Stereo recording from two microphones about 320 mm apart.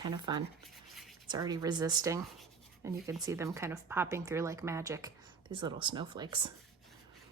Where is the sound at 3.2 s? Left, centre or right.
Centre.